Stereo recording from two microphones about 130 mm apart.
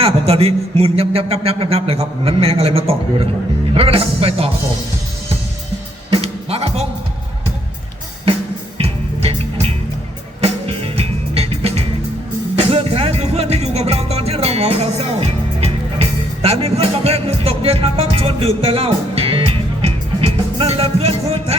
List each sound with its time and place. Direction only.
0.0 s a man's voice: 50° right (ahead or behind)
6.2 s music: 50° right (ahead or behind)
8.8 s music: 50° right (ahead or behind)